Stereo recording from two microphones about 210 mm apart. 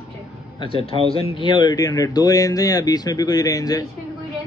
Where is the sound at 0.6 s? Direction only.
25° left (ahead or behind).